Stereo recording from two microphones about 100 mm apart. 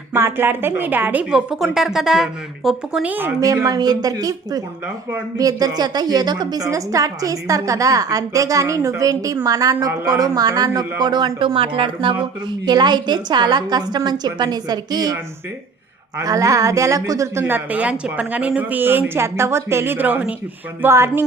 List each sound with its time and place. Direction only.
0.1 s a woman's voice: 25° right (ahead or behind)
1.2 s speech: 5° right (ahead or behind)
3.4 s a woman's voice: 35° right (ahead or behind); by 11.5 s 50° right (ahead or behind)
11.5 s speech: 65° right (ahead or behind)
12.5 s a woman's voice: 45° right (ahead or behind)
17.4 s a woman's voice: 15° right (ahead or behind)